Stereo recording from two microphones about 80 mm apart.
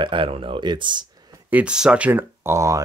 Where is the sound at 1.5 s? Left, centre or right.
Right.